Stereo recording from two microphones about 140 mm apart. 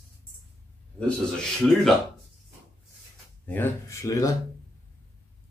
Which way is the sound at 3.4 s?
15° left (ahead or behind).